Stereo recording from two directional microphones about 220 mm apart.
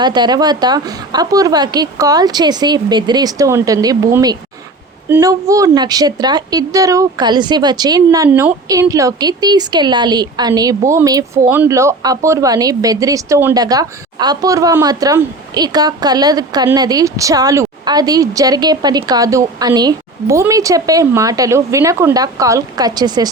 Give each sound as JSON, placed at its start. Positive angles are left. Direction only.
{"t": 0.0, "sound": "a woman's voice", "side_deg": -20}